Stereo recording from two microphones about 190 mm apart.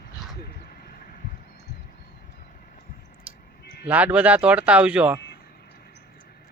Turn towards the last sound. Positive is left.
turn(degrees=-5)  # may be behind; listen again after turning